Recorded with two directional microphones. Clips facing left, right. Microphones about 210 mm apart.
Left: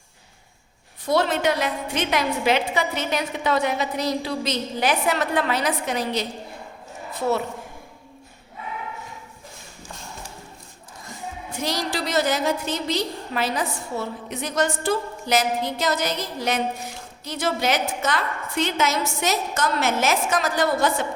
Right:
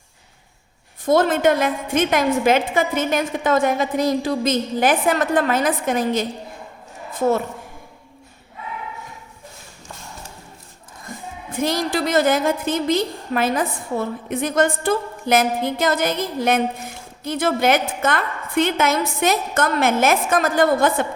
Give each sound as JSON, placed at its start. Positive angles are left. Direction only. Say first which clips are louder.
{"t": 1.0, "sound": "a woman's voice", "louder": "right 5 dB", "side_deg": -50}
{"t": 11.0, "sound": "a woman's voice", "louder": "right 1 dB", "side_deg": -55}